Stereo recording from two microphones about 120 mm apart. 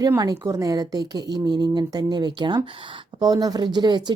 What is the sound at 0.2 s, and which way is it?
Speech, 30° right (ahead or behind).